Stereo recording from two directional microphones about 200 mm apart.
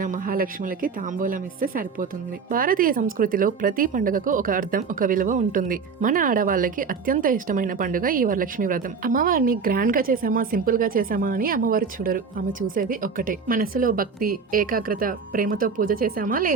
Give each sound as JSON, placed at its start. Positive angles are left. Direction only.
{"t": 0.0, "sound": "speech", "side_deg": -45}